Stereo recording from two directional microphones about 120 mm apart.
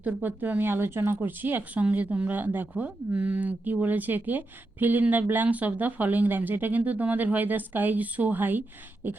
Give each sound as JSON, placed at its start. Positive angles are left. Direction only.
{"t": 0.0, "sound": "speech", "side_deg": -15}